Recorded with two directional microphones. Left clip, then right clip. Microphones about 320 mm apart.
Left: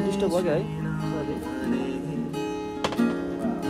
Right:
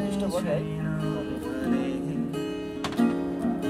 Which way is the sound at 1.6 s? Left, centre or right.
Centre.